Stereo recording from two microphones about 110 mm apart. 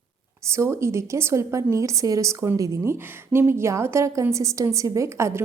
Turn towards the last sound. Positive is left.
turn(degrees=-25)  # may be behind; listen again after turning